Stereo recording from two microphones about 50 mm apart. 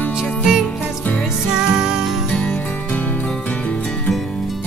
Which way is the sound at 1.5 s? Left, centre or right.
Centre.